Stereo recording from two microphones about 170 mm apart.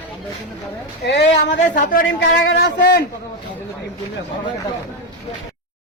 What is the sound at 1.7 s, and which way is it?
A man's voice, 60° left (ahead or behind).